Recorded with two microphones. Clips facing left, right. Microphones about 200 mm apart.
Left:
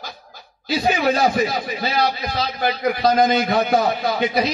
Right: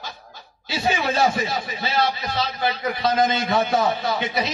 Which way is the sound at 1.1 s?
40° left (ahead or behind).